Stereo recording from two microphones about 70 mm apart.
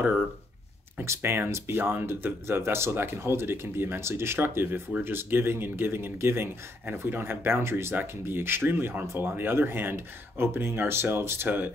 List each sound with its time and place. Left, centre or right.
1.0 s speech: right